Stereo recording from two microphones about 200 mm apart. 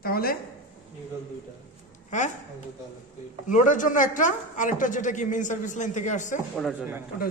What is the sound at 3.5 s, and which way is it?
A woman's voice, 40° left (ahead or behind).